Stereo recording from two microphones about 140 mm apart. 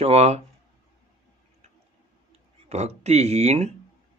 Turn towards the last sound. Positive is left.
turn(degrees=-50)  # may be behind; listen again after turning